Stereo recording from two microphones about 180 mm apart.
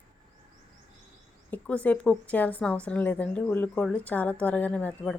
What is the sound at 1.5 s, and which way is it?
A woman's voice, 5° left (ahead or behind).